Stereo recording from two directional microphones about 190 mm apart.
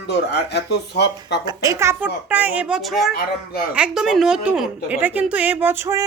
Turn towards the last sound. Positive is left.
turn(degrees=-15)  # may be behind; listen again after turning